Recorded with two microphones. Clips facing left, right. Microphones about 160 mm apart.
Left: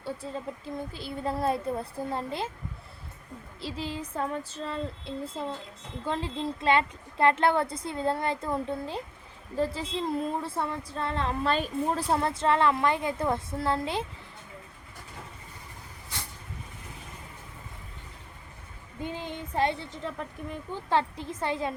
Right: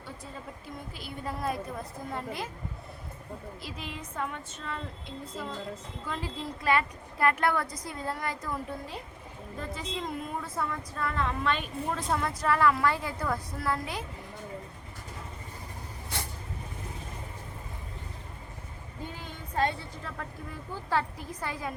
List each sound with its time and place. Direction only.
0.0 s speech: 30° left (ahead or behind)
3.6 s speech: 30° left (ahead or behind)
19.0 s speech: 20° left (ahead or behind)